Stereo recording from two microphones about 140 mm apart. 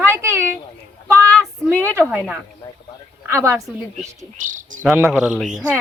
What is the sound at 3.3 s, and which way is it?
Speech, 20° right (ahead or behind).